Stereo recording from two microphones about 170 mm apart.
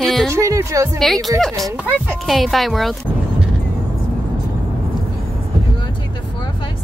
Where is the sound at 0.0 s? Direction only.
Centre (ahead or behind).